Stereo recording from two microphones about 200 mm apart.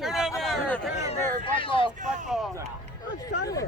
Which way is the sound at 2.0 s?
40° right (ahead or behind).